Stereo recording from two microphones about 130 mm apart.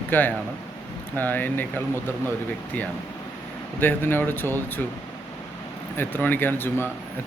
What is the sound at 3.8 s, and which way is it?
Speech, 15° left (ahead or behind).